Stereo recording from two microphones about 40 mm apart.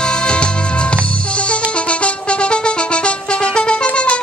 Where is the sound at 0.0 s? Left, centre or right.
Left.